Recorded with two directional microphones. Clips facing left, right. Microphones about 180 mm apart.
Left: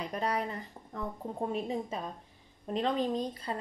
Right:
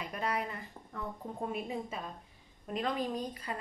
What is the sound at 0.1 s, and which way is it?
A woman's voice, 35° left (ahead or behind).